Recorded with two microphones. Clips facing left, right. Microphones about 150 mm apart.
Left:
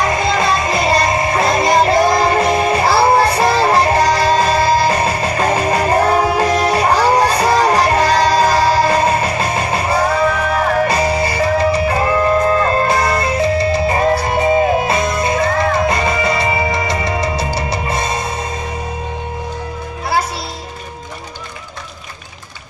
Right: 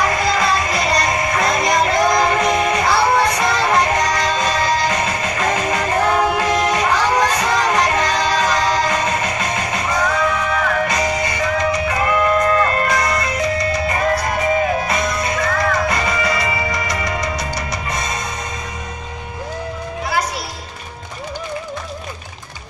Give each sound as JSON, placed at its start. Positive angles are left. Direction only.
{"t": 0.0, "sound": "music", "side_deg": 25}